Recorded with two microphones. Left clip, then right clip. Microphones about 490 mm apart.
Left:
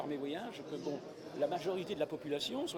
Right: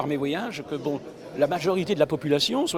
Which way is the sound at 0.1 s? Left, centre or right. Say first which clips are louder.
Right 13 dB; right.